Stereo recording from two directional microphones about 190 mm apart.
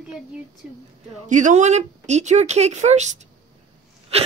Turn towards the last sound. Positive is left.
turn(degrees=-35)  # may be behind; listen again after turning